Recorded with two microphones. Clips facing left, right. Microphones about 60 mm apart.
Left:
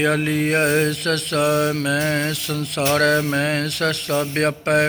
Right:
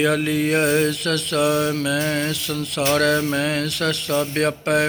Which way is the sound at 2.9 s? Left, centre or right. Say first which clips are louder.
Left 2 dB; left.